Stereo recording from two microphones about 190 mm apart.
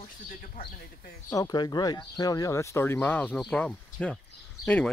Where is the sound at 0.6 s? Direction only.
50° left (ahead or behind).